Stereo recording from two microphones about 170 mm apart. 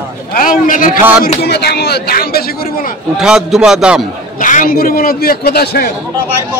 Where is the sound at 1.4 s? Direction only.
75° left (ahead or behind).